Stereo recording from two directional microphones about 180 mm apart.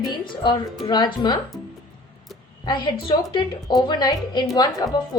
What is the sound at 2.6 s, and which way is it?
A woman's voice, 25° left (ahead or behind).